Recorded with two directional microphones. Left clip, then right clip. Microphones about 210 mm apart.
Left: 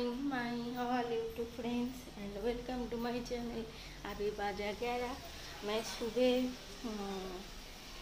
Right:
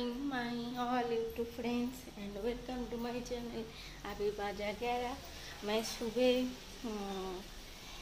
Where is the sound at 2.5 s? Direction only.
5° right (ahead or behind).